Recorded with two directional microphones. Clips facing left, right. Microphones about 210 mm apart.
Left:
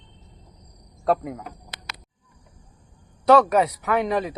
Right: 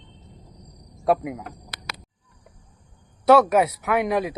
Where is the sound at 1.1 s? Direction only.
10° right (ahead or behind).